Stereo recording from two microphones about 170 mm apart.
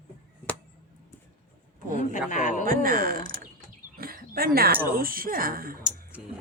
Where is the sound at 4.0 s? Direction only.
60° right (ahead or behind).